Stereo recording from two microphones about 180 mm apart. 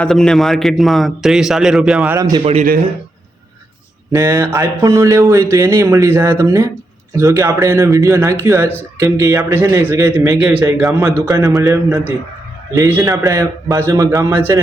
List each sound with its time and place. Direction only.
0.0 s a man's voice: 5° left (ahead or behind)
2.1 s a man's voice: 20° right (ahead or behind)
2.4 s speech: 35° right (ahead or behind)
4.1 s speech: 15° right (ahead or behind)
11.3 s a man's voice: 20° right (ahead or behind)
12.7 s speech: 15° right (ahead or behind)